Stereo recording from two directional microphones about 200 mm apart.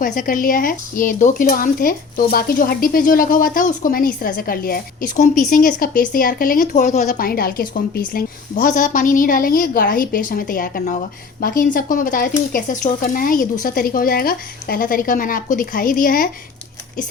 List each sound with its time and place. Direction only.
0.0 s speech: 40° left (ahead or behind)
7.1 s speech: 50° left (ahead or behind)